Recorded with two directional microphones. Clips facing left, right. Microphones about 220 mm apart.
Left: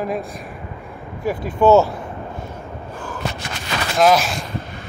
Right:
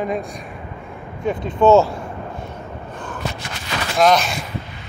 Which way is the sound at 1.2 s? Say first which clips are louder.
Even; 20° right (ahead or behind).